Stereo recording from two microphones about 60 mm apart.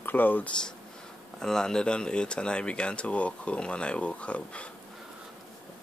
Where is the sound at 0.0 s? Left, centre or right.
Left.